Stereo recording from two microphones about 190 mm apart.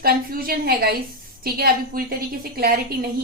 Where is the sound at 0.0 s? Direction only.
50° right (ahead or behind).